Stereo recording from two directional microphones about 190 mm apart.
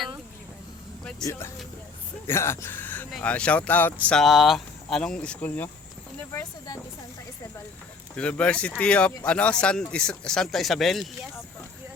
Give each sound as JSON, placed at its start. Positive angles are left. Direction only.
{"t": 1.2, "sound": "speech", "side_deg": 15}
{"t": 8.1, "sound": "speech", "side_deg": 5}